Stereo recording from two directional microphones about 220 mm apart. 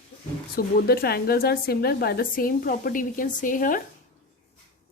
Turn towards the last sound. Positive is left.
turn(degrees=40)  # may be behind; listen again after turning